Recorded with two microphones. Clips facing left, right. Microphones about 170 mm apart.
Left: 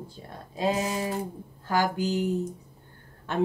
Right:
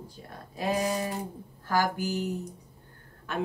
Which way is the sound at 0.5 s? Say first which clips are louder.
Left 1 dB; 25° left (ahead or behind).